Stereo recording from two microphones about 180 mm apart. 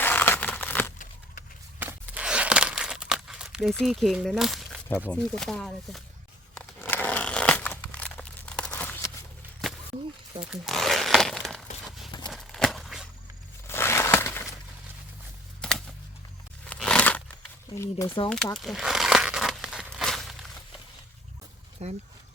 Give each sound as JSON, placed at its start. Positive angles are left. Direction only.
{"t": 0.0, "sound": "crumpling", "side_deg": 10}
{"t": 1.8, "sound": "crumpling", "side_deg": -10}
{"t": 4.9, "sound": "speech", "side_deg": 10}
{"t": 6.5, "sound": "a sound", "side_deg": 10}
{"t": 10.4, "sound": "crumpling", "side_deg": 0}
{"t": 12.3, "sound": "a sound", "side_deg": 0}
{"t": 13.7, "sound": "a sound", "side_deg": 15}
{"t": 15.6, "sound": "typing", "side_deg": 5}
{"t": 16.6, "sound": "a sound", "side_deg": 5}
{"t": 18.2, "sound": "speech", "side_deg": 25}
{"t": 18.5, "sound": "crumpling", "side_deg": 0}
{"t": 21.8, "sound": "speech", "side_deg": -40}